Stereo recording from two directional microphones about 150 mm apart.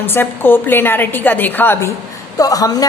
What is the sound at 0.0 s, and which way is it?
A woman's voice, 15° left (ahead or behind).